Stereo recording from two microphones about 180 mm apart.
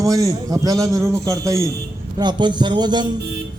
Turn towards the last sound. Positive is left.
turn(degrees=-25)  # may be behind; listen again after turning